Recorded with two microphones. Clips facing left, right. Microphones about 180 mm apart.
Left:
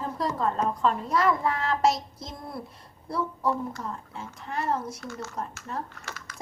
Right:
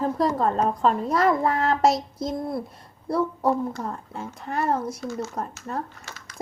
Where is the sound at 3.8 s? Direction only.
40° right (ahead or behind).